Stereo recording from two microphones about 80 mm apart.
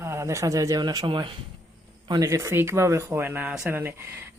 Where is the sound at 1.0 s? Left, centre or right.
Right.